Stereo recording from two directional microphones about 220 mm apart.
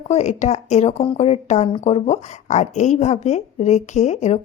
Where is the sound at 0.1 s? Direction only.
30° left (ahead or behind).